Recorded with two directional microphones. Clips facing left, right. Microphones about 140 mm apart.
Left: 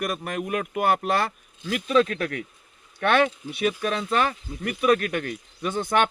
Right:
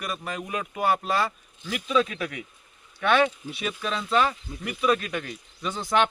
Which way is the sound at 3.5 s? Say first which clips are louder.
Left 5 dB; 55° left (ahead or behind).